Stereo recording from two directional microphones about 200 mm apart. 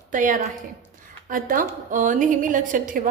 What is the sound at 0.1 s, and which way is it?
A woman's voice, 40° right (ahead or behind).